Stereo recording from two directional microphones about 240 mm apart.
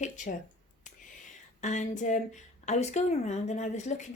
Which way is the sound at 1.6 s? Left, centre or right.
Left.